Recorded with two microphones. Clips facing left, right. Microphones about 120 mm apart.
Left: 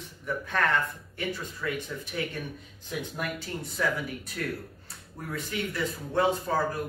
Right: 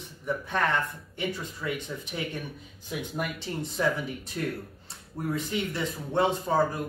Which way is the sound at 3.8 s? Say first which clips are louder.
Right 2 dB; 30° right (ahead or behind).